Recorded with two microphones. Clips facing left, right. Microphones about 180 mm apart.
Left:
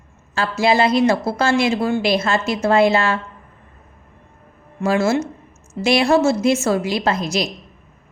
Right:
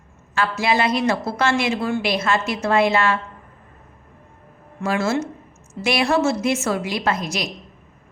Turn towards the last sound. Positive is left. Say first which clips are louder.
# left 3 dB
turn(degrees=30)  # may be behind; listen again after turning